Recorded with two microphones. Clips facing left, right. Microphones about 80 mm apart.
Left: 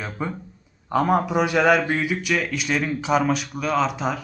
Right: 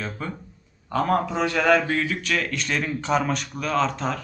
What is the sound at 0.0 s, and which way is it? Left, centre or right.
A man's voice, centre.